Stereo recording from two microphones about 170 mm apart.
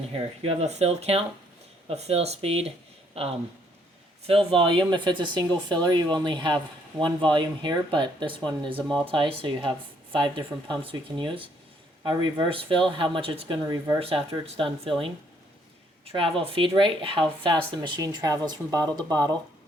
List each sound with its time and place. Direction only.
0.1 s speech: 40° right (ahead or behind)
4.3 s speech: 30° right (ahead or behind)
14.0 s speech: 35° right (ahead or behind)